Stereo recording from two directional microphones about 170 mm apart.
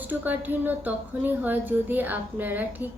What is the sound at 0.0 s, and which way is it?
Speech, 10° right (ahead or behind).